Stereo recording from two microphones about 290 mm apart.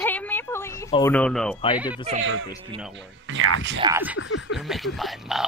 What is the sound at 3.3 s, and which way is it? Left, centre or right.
Speech, right.